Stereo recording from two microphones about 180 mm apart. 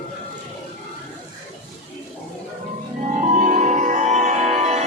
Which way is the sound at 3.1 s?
45° right (ahead or behind).